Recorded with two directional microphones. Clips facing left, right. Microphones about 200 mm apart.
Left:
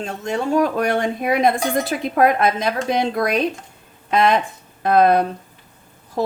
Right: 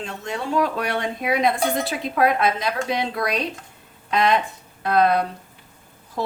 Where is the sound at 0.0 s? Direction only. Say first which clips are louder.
Left 6 dB; 45° left (ahead or behind).